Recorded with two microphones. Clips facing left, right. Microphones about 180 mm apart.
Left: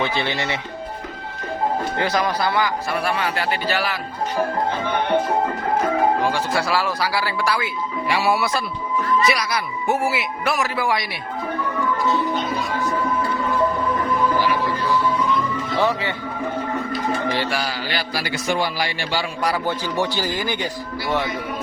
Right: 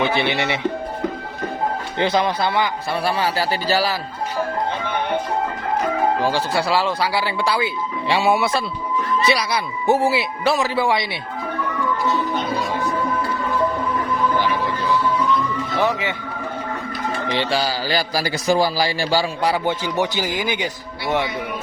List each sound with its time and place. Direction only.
0.2 s speech: 20° right (ahead or behind)
2.0 s a man's voice: 25° right (ahead or behind)
6.2 s speech: 30° right (ahead or behind)
15.8 s a man's voice: 15° right (ahead or behind)
17.2 s a man's voice: 20° right (ahead or behind)
20.0 s a man's voice: 15° right (ahead or behind)